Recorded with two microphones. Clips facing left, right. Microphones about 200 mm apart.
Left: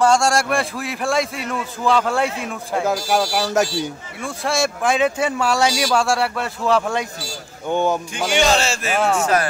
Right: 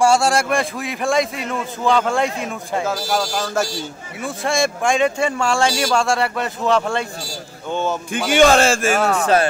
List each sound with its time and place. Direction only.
0.0 s a man's voice: 5° right (ahead or behind)
2.9 s speech: 15° left (ahead or behind)
4.2 s a man's voice: centre (ahead or behind)
8.1 s speech: 55° right (ahead or behind)